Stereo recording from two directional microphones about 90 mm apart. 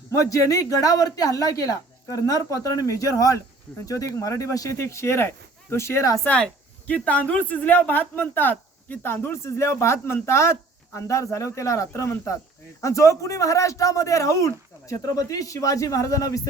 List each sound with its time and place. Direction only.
0.1 s speech: 35° left (ahead or behind)
6.2 s speech: 15° left (ahead or behind); by 16.5 s 40° left (ahead or behind)